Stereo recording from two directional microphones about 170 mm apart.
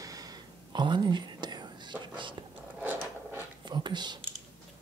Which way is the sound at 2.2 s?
30° right (ahead or behind).